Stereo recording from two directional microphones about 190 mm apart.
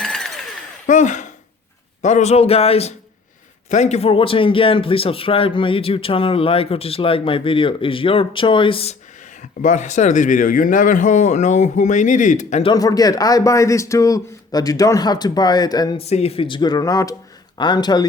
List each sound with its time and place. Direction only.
0.0 s a sound: centre (ahead or behind)
0.9 s a man's voice: 40° left (ahead or behind)
9.4 s speech: 40° left (ahead or behind)
12.7 s a man's voice: 20° left (ahead or behind)
16.0 s a man's voice: 35° left (ahead or behind)